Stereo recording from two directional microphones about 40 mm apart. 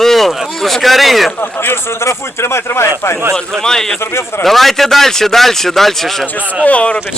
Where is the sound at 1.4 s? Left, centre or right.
Left.